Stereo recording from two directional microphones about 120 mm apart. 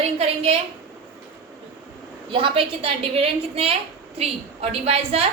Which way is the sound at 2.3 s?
50° right (ahead or behind).